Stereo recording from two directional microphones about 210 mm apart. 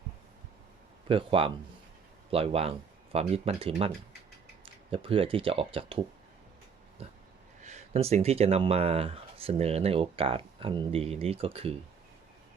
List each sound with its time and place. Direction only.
1.0 s speech: 25° right (ahead or behind)
7.0 s a sound: 30° right (ahead or behind)
7.6 s speech: 30° right (ahead or behind)